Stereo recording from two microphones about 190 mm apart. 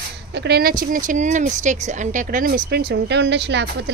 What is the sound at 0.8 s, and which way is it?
Speech, 45° right (ahead or behind).